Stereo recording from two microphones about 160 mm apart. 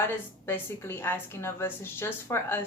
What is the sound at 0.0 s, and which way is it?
A woman's voice, 15° left (ahead or behind).